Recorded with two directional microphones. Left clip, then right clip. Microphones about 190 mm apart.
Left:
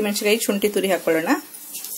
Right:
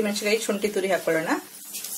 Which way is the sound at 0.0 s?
40° left (ahead or behind).